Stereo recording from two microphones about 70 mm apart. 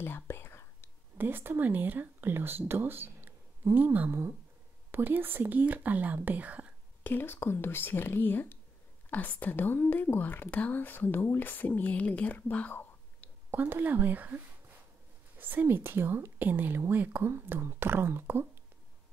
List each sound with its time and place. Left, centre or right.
0.0 s whispering: left
1.1 s speech: right
4.1 s speech: right
7.0 s speech: left
13.5 s speech: right